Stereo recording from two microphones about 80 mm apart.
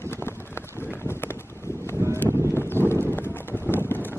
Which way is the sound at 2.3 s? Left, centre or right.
Right.